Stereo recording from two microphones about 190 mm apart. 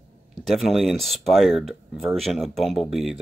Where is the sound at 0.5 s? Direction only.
Centre (ahead or behind).